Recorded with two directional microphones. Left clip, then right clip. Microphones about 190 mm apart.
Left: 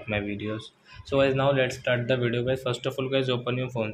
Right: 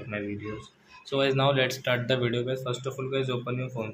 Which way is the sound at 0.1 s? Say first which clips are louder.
Left 4 dB; 30° left (ahead or behind).